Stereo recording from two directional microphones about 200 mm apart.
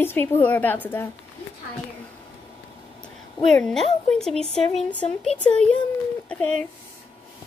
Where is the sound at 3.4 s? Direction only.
Centre (ahead or behind).